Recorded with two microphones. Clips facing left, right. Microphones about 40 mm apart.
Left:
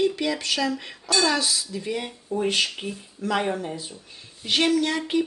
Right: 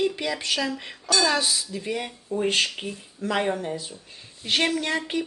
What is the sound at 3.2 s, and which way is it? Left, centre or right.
Speech, right.